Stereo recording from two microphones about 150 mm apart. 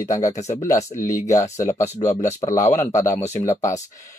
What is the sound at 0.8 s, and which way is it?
Speech, 55° left (ahead or behind).